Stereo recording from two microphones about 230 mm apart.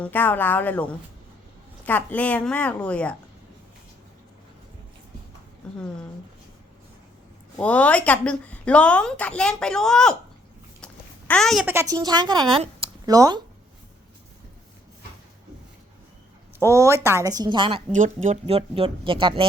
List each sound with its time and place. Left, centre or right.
0.0 s a woman's voice: centre
5.6 s a woman's voice: centre
7.6 s a woman's voice: centre
11.3 s a woman's voice: centre
11.7 s a woman's voice: centre
16.6 s a woman's voice: centre
17.9 s speech: right